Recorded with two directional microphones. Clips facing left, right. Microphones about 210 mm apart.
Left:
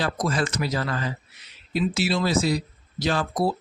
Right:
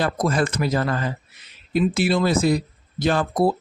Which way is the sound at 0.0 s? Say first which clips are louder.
Right 4 dB; 55° right (ahead or behind).